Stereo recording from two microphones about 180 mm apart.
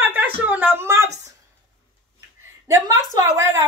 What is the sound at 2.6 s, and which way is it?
A woman's voice, 20° right (ahead or behind).